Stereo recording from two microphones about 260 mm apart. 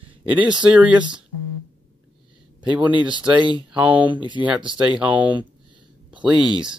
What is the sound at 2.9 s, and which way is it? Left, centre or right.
Speech, centre.